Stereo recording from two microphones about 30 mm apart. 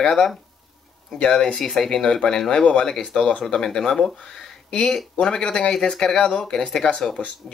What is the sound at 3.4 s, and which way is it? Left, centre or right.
Speech, left.